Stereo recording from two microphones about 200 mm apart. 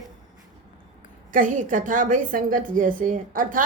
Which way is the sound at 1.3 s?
40° right (ahead or behind).